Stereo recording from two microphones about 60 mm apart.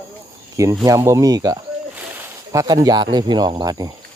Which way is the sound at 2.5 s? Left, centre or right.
Right.